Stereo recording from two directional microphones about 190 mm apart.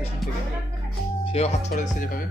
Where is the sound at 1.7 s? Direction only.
50° left (ahead or behind).